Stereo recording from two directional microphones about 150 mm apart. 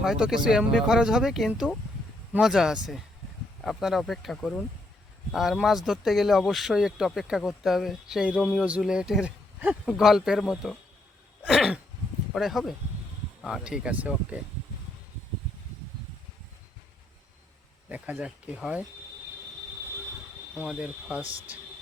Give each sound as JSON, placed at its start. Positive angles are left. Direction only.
{"t": 0.0, "sound": "speech", "side_deg": -5}
{"t": 17.8, "sound": "speech", "side_deg": -10}
{"t": 20.6, "sound": "speech", "side_deg": -5}
{"t": 21.2, "sound": "speech", "side_deg": -35}